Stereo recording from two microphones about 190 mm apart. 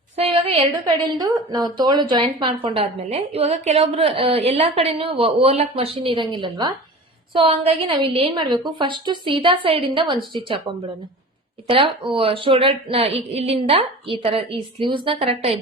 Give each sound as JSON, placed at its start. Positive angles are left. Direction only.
{"t": 0.2, "sound": "a sound", "side_deg": -30}
{"t": 1.0, "sound": "a woman's voice", "side_deg": -20}
{"t": 11.7, "sound": "a woman's voice", "side_deg": -25}